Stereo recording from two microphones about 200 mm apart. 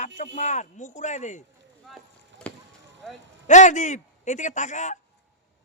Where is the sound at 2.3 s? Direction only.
65° right (ahead or behind).